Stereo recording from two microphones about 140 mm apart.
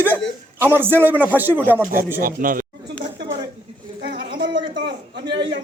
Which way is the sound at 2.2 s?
90° right.